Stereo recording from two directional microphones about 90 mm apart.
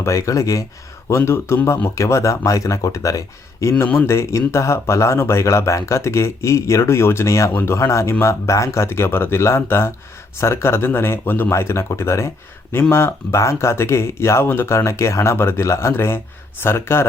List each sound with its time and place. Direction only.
0.0 s speech: 35° left (ahead or behind)